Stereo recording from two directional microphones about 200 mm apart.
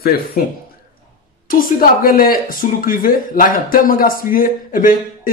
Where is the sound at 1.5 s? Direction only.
45° left (ahead or behind).